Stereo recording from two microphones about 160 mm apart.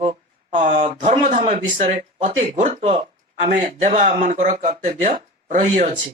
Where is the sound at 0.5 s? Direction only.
50° right (ahead or behind).